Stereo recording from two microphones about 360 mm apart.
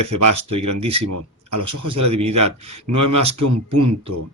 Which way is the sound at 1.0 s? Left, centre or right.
Right.